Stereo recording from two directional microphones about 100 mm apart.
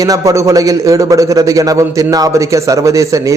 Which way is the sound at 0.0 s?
35° right (ahead or behind).